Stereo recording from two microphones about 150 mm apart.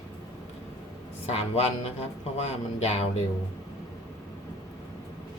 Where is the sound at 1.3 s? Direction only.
40° left (ahead or behind).